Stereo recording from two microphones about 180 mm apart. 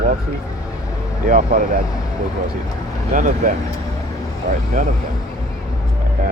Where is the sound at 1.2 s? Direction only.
50° right (ahead or behind).